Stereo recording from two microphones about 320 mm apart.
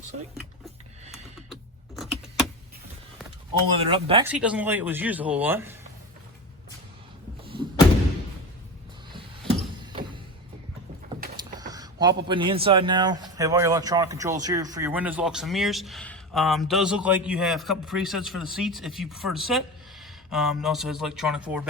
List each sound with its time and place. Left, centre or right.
2.0 s keys jangling: centre
3.8 s speech: centre
4.3 s a man's voice: centre
7.4 s thump: centre
9.1 s a sound: centre
11.6 s a man's voice: centre